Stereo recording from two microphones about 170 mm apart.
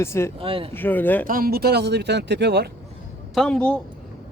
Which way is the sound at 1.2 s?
60° right (ahead or behind).